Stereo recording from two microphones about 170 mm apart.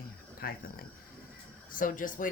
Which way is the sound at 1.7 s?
50° left (ahead or behind).